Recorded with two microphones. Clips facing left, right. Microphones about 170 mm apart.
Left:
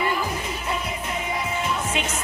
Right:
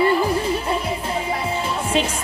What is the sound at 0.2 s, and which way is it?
Music, 30° right (ahead or behind).